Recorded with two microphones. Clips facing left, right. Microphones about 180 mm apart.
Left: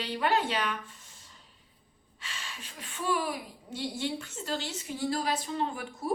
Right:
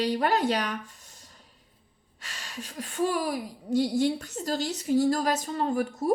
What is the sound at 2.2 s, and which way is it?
A woman's voice, 40° right (ahead or behind).